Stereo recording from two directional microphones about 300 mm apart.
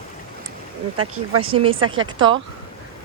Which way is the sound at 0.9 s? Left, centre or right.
Right.